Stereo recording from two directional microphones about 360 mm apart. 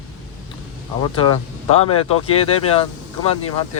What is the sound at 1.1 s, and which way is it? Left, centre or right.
Speech, centre.